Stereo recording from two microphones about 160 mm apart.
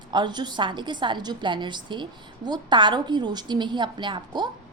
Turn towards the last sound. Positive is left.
turn(degrees=-30)  # may be behind; listen again after turning